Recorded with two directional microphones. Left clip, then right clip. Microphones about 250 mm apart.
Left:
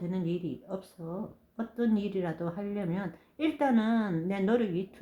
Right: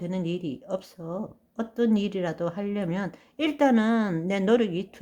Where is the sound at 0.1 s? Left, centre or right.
Right.